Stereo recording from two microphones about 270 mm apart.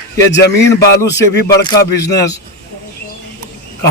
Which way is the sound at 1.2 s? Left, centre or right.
Centre.